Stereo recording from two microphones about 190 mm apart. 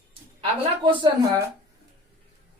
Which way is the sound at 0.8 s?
25° right (ahead or behind).